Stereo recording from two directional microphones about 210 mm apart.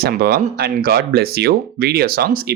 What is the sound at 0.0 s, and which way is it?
Speech, 45° right (ahead or behind).